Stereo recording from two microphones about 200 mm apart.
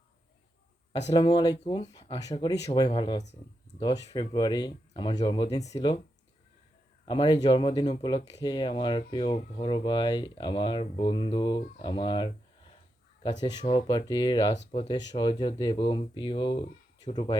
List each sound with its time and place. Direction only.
1.1 s speech: 20° left (ahead or behind)
7.0 s speech: 25° left (ahead or behind)